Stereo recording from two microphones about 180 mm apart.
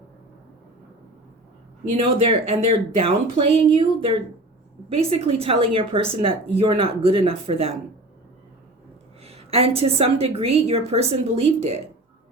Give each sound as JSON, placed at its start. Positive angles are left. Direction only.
{"t": 2.0, "sound": "speech", "side_deg": -30}
{"t": 9.2, "sound": "speech", "side_deg": -35}